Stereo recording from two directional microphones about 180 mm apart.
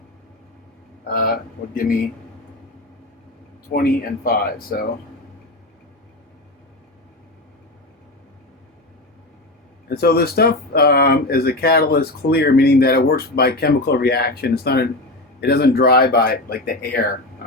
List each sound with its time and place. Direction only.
1.1 s speech: 55° left (ahead or behind)
3.7 s speech: 55° left (ahead or behind)
9.9 s speech: 60° left (ahead or behind)